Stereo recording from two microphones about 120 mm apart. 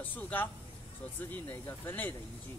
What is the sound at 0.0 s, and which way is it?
Speech, 15° left (ahead or behind).